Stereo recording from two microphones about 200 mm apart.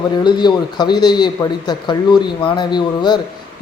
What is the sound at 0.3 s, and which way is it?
A man's voice, 20° left (ahead or behind).